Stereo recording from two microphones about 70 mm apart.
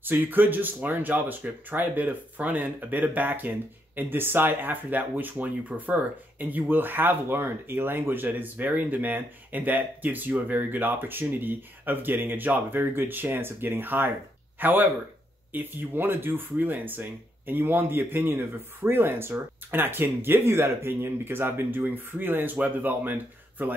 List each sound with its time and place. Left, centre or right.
0.0 s a man's voice: right